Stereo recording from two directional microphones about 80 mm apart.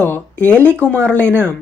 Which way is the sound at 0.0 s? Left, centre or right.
Left.